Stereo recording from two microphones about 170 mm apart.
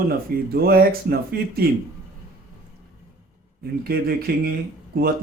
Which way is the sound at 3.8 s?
60° right (ahead or behind).